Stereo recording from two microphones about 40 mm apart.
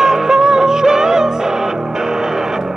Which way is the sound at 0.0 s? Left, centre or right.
Centre.